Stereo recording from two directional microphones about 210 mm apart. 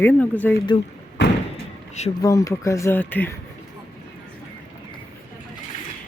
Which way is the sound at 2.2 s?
15° left (ahead or behind).